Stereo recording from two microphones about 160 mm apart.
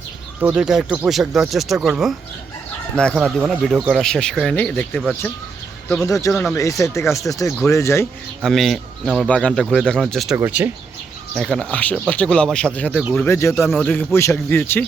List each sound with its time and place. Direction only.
0.4 s speech: 5° right (ahead or behind)
6.0 s speech: 20° left (ahead or behind)
8.4 s speech: centre (ahead or behind)
10.3 s speech: 10° right (ahead or behind)
11.3 s speech: 5° left (ahead or behind)
13.5 s speech: centre (ahead or behind)